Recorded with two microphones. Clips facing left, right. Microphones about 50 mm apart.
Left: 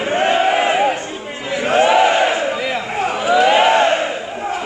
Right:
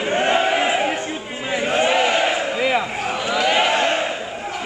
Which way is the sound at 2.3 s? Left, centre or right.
Centre.